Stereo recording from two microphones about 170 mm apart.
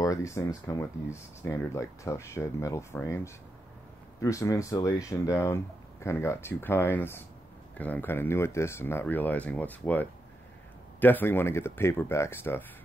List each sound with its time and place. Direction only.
0.0 s speech: 20° left (ahead or behind)
4.2 s speech: 20° left (ahead or behind)